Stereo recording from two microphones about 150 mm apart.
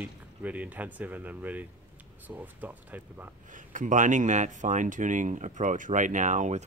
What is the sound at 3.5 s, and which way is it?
Speech, 60° right (ahead or behind).